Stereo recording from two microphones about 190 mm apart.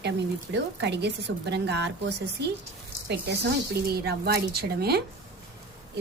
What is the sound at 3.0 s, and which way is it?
A woman's voice, 60° right (ahead or behind).